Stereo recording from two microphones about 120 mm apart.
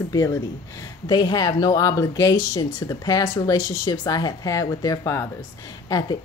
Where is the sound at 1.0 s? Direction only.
35° left (ahead or behind).